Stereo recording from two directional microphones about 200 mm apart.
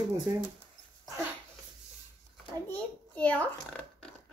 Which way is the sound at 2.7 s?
5° left (ahead or behind).